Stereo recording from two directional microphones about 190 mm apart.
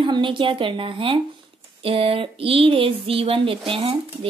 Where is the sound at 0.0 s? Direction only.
25° right (ahead or behind).